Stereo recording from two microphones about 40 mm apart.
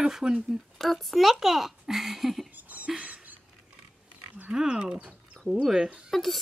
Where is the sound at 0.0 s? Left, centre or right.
Centre.